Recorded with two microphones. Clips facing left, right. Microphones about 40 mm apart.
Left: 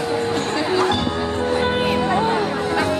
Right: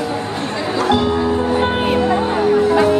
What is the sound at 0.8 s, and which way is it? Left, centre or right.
Music, centre.